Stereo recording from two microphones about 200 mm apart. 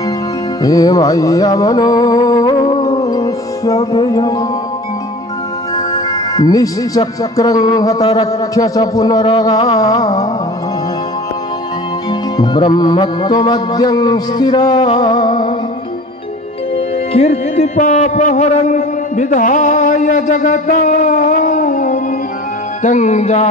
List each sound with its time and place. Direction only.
0.6 s music: 15° left (ahead or behind)
3.9 s speech: 20° left (ahead or behind)
6.3 s speech: 15° left (ahead or behind)
9.2 s music: 20° left (ahead or behind)
9.8 s speech: 20° left (ahead or behind)
12.1 s music: 20° left (ahead or behind)
16.7 s music: 30° left (ahead or behind)
22.8 s speech: 35° left (ahead or behind)